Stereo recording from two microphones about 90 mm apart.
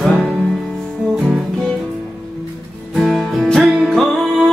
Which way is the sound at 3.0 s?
Centre (ahead or behind).